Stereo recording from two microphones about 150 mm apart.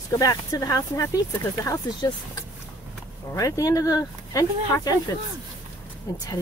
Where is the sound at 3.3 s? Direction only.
20° left (ahead or behind).